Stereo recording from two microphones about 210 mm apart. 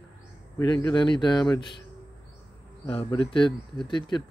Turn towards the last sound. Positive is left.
turn(degrees=20)  # may be behind; listen again after turning